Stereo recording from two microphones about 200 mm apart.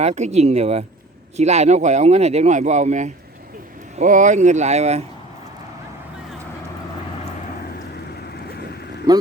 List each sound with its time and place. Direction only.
0.0 s speech: 35° right (ahead or behind)
9.1 s speech: 20° right (ahead or behind)